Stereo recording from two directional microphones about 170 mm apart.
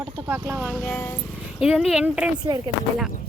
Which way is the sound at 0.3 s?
15° right (ahead or behind).